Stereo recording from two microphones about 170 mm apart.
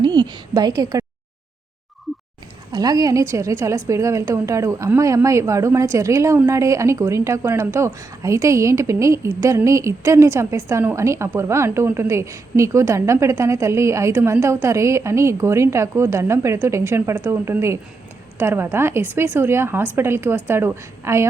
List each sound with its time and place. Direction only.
0.0 s a woman's voice: 25° right (ahead or behind)
2.1 s a sound: centre (ahead or behind)
2.7 s a woman's voice: 20° right (ahead or behind)